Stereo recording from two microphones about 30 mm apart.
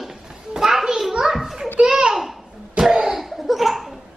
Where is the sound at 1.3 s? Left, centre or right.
Centre.